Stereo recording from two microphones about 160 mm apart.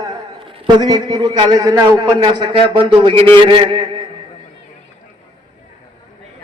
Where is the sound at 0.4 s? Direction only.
30° right (ahead or behind).